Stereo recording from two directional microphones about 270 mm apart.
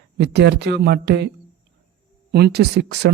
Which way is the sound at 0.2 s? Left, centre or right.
Right.